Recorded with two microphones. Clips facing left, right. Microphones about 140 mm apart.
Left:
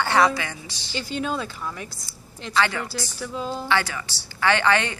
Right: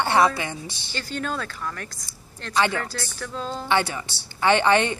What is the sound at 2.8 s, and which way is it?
Speech, 10° left (ahead or behind).